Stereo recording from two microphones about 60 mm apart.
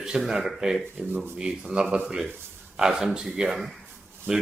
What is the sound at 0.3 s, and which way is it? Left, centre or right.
Speech, centre.